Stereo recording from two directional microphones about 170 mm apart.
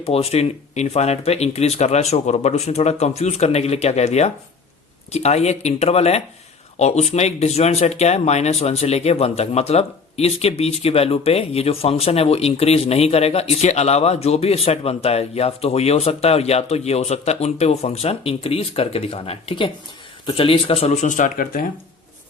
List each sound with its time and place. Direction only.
0.0 s speech: 35° left (ahead or behind); by 21.7 s 55° left (ahead or behind)